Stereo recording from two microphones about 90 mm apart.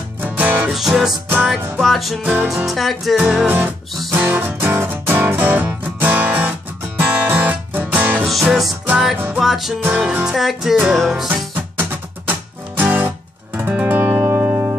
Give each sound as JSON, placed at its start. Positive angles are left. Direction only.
{"t": 0.2, "sound": "music", "side_deg": -20}
{"t": 0.7, "sound": "music", "side_deg": -5}
{"t": 3.2, "sound": "music", "side_deg": -15}
{"t": 8.3, "sound": "music", "side_deg": 0}
{"t": 11.2, "sound": "music", "side_deg": -20}